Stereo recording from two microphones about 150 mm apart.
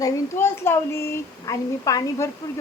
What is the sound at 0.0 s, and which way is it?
A child's voice, 15° left (ahead or behind).